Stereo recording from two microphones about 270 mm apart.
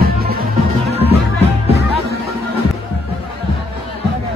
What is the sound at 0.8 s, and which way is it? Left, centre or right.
Music, right.